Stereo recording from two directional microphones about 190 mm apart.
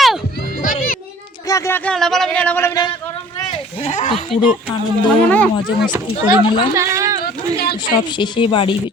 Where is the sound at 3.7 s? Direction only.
35° left (ahead or behind).